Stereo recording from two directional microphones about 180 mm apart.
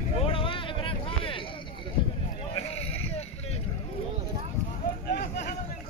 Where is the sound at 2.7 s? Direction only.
35° left (ahead or behind).